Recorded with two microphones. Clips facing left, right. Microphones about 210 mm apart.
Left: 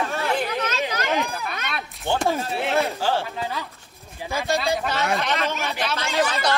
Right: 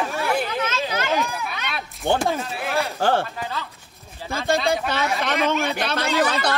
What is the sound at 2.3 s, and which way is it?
Speech, 30° left (ahead or behind).